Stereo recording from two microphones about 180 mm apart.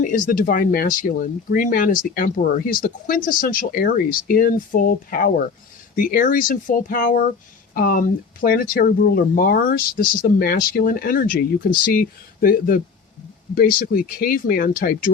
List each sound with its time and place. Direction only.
0.0 s speech: 50° left (ahead or behind)